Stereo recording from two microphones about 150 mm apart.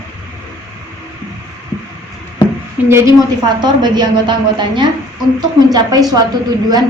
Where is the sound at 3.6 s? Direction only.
30° right (ahead or behind).